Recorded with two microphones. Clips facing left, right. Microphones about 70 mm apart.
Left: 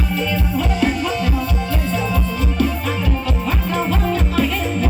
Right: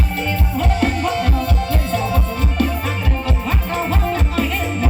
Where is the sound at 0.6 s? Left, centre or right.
Right.